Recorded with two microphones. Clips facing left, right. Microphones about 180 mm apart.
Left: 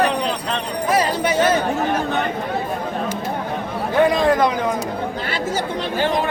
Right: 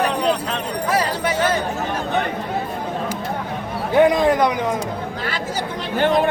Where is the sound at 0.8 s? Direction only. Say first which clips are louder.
Left 3 dB; 20° left (ahead or behind).